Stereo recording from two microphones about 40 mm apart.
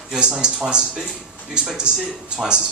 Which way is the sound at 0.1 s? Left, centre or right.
Centre.